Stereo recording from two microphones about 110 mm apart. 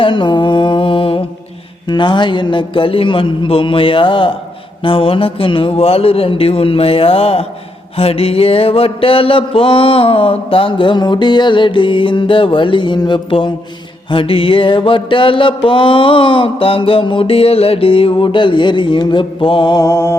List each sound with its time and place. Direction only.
0.0 s mantra: 45° left (ahead or behind)
4.8 s speech: 55° left (ahead or behind)
7.9 s mantra: 60° left (ahead or behind)
19.7 s mantra: 30° left (ahead or behind)